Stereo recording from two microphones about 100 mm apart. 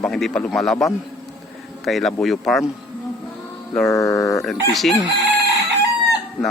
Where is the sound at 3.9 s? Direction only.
30° left (ahead or behind).